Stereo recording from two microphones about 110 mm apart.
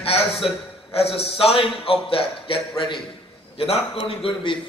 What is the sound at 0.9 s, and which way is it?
A man's voice, 60° left (ahead or behind).